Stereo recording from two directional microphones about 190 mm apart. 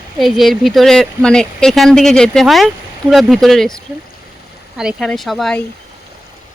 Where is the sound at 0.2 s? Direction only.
Centre (ahead or behind).